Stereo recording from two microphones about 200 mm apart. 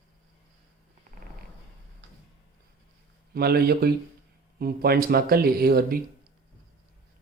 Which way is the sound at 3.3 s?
50° right (ahead or behind).